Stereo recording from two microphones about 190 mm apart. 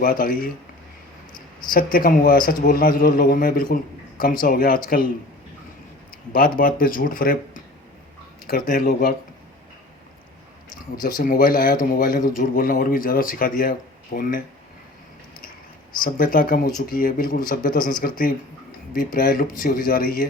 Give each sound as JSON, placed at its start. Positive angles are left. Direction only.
{"t": 0.0, "sound": "a man's voice", "side_deg": 45}
{"t": 1.7, "sound": "a man's voice", "side_deg": 50}
{"t": 6.3, "sound": "a man's voice", "side_deg": 50}
{"t": 11.0, "sound": "a man's voice", "side_deg": 50}
{"t": 16.0, "sound": "a man's voice", "side_deg": 50}
{"t": 18.9, "sound": "a man's voice", "side_deg": 50}